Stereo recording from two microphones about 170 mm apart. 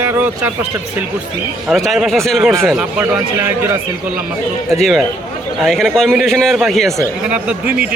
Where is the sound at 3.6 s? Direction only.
15° right (ahead or behind).